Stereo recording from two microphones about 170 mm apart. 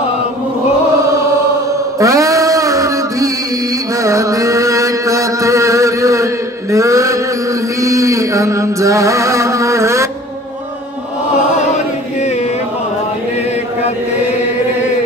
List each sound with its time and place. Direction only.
2.0 s a sound: 20° right (ahead or behind)
4.0 s chant: 20° right (ahead or behind)
7.8 s music: 20° right (ahead or behind)
11.6 s chant: 40° left (ahead or behind)